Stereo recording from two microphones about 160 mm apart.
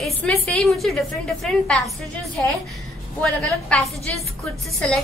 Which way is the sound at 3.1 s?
5° left (ahead or behind).